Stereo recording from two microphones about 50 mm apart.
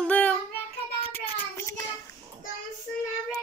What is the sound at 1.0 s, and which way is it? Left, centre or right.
Child singing, left.